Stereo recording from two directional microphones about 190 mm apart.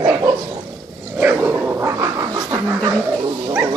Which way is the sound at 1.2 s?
10° right (ahead or behind).